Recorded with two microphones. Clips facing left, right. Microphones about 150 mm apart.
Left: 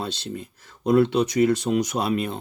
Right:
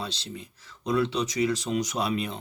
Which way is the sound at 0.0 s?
50° left (ahead or behind).